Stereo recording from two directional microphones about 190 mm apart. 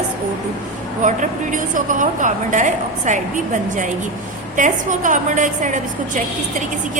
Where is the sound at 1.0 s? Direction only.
40° right (ahead or behind).